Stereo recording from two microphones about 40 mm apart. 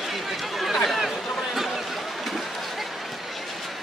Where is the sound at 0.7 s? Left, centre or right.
Centre.